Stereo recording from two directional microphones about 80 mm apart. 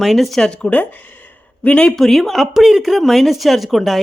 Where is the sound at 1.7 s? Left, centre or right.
Centre.